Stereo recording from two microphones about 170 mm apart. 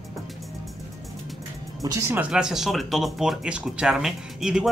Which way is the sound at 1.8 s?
20° right (ahead or behind).